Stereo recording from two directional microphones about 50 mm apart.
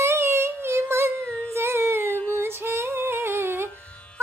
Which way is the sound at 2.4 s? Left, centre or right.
Right.